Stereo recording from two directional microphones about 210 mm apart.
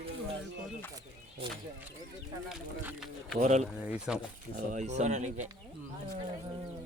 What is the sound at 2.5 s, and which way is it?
Speech, centre (ahead or behind).